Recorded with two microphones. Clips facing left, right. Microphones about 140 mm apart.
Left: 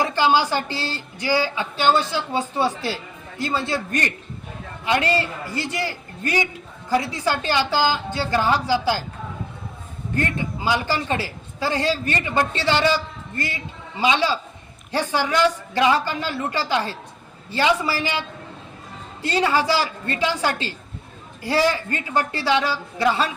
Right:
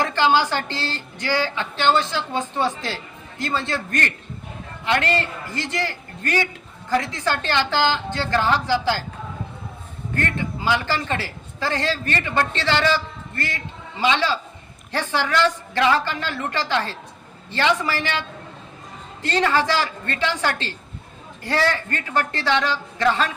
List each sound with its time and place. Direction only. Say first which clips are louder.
0.0 s a woman's voice: even; 10° left (ahead or behind)
10.2 s a woman's voice: left 1 dB; 15° left (ahead or behind)